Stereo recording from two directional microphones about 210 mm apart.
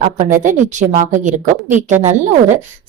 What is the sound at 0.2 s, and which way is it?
A woman's voice, 40° right (ahead or behind).